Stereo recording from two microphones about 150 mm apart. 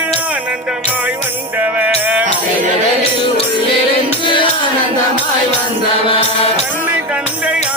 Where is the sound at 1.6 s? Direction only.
10° right (ahead or behind).